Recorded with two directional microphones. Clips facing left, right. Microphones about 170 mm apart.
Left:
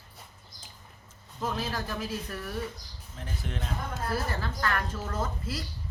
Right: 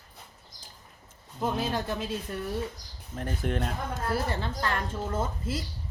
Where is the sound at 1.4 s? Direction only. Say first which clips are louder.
Right 3 dB; 25° right (ahead or behind).